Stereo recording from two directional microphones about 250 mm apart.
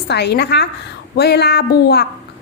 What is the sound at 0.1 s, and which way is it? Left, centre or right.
A woman's voice, left.